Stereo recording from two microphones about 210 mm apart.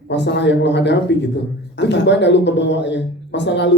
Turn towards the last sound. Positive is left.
turn(degrees=55)  # may be behind; listen again after turning